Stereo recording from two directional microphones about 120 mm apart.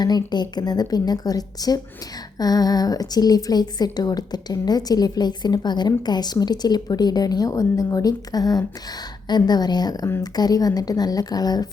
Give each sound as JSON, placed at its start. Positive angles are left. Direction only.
{"t": 0.0, "sound": "speech", "side_deg": 35}